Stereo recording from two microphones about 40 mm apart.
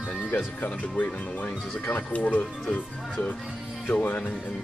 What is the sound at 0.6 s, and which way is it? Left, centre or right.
Speech, left.